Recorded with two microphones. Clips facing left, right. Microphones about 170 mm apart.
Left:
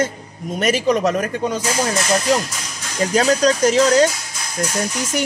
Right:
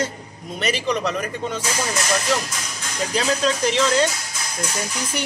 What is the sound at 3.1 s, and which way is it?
Speech, 45° left (ahead or behind).